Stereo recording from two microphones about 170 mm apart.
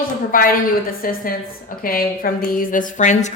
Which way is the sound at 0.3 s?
55° left (ahead or behind).